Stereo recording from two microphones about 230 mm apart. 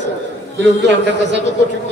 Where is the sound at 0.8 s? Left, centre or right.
Right.